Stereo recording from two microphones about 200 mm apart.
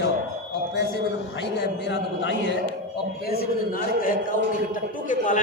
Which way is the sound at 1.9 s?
60° left (ahead or behind).